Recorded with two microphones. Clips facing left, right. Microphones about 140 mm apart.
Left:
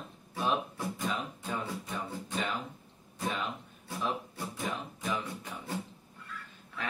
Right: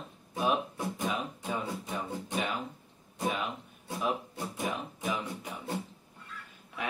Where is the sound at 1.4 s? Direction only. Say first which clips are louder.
Right 2 dB; 20° right (ahead or behind).